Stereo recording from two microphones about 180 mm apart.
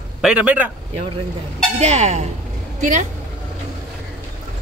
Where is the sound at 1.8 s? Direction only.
40° right (ahead or behind).